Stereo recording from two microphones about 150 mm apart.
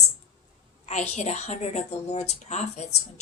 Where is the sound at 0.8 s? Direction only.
50° left (ahead or behind).